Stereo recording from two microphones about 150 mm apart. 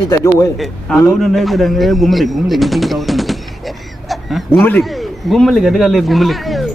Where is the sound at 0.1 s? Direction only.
20° left (ahead or behind).